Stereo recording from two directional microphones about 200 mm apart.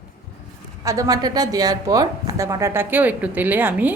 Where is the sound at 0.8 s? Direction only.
15° right (ahead or behind).